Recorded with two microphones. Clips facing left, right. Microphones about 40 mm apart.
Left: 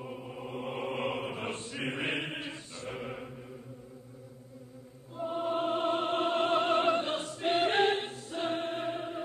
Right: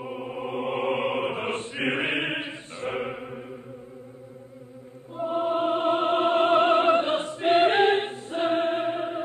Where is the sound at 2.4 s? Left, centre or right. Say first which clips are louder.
Right 7 dB; right.